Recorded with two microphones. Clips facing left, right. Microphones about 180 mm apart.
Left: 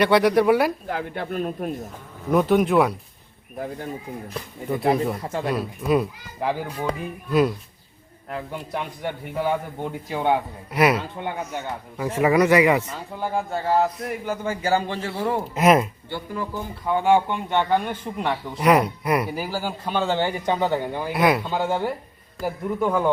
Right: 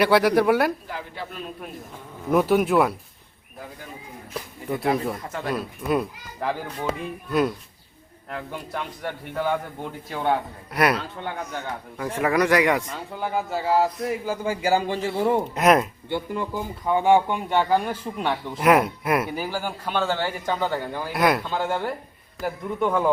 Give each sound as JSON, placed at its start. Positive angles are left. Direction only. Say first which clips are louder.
{"t": 0.0, "sound": "a man's voice", "louder": "left 1 dB", "side_deg": 0}
{"t": 0.9, "sound": "speech", "louder": "left 6 dB", "side_deg": 55}
{"t": 2.3, "sound": "a man's voice", "louder": "left 1 dB", "side_deg": -5}
{"t": 5.2, "sound": "speech", "louder": "left 5 dB", "side_deg": 30}
{"t": 5.5, "sound": "a man's voice", "louder": "left 2 dB", "side_deg": 0}
{"t": 6.4, "sound": "speech", "louder": "left 2 dB", "side_deg": 10}
{"t": 6.8, "sound": "a man's voice", "louder": "right 1 dB", "side_deg": 0}
{"t": 15.5, "sound": "a man's voice", "louder": "left 3 dB", "side_deg": 0}
{"t": 16.0, "sound": "speech", "louder": "right 2 dB", "side_deg": -20}
{"t": 21.1, "sound": "a man's voice", "louder": "left 1 dB", "side_deg": 0}
{"t": 21.4, "sound": "speech", "louder": "left 2 dB", "side_deg": 15}
{"t": 22.4, "sound": "a man's voice", "louder": "left 1 dB", "side_deg": 0}